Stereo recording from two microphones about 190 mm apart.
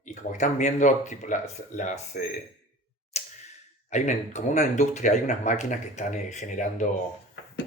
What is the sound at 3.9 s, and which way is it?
Speech, 40° left (ahead or behind).